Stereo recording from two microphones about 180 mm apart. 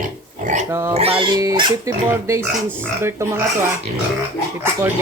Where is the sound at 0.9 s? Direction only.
30° right (ahead or behind); by 3.4 s 15° right (ahead or behind).